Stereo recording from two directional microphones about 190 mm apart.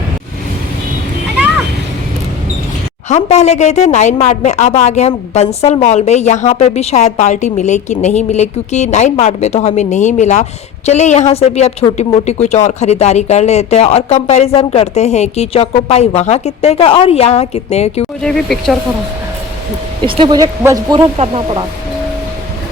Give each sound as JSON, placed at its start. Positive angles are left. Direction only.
{"t": 3.1, "sound": "a woman's voice", "side_deg": 35}
{"t": 18.2, "sound": "speech", "side_deg": 5}
{"t": 20.1, "sound": "speech", "side_deg": -25}